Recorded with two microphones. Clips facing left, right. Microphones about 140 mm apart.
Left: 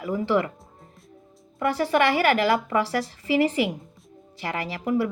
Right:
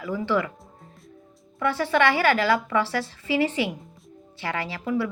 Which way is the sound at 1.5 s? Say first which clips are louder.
Left 1 dB; 40° left (ahead or behind).